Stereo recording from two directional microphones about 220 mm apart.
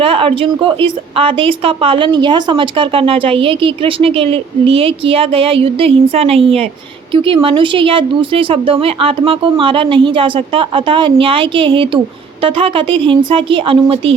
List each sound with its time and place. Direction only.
0.0 s a woman's voice: 25° right (ahead or behind)